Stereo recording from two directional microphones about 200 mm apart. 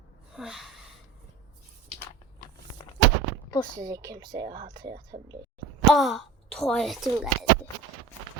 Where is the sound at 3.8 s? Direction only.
15° right (ahead or behind).